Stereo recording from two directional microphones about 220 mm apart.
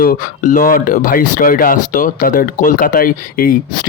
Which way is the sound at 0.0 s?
40° left (ahead or behind).